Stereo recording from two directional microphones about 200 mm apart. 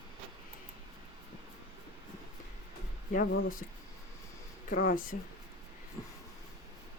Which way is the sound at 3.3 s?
75° left (ahead or behind).